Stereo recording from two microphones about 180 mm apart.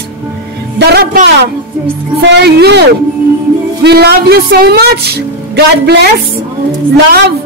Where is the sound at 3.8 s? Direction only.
65° right (ahead or behind).